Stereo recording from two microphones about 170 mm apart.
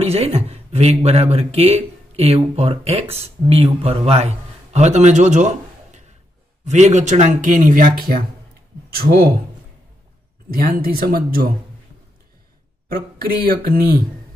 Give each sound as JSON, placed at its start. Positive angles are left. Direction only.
{"t": 0.0, "sound": "speech", "side_deg": -35}
{"t": 10.5, "sound": "speech", "side_deg": -60}
{"t": 12.8, "sound": "speech", "side_deg": -60}